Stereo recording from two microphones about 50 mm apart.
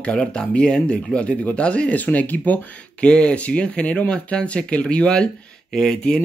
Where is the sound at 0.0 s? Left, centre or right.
Left.